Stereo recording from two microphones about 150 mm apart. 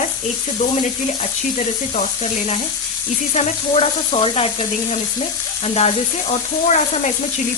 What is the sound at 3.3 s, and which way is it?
Sizzle, 45° left (ahead or behind).